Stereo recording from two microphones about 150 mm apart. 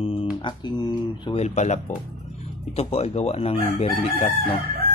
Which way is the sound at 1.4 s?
50° left (ahead or behind).